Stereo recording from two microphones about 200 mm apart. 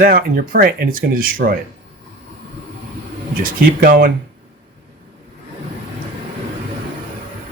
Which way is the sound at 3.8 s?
45° right (ahead or behind).